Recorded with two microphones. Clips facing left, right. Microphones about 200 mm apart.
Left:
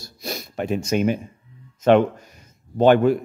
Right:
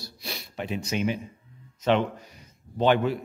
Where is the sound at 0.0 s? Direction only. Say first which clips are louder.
Left 7 dB; 45° left (ahead or behind).